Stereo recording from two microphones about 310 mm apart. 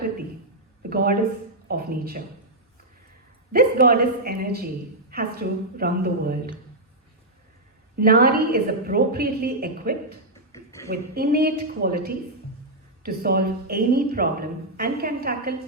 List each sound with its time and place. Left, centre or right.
0.8 s a sound: right
1.6 s speech: right
3.5 s speech: right
7.9 s speech: right
10.5 s a sound: centre
10.8 s speech: right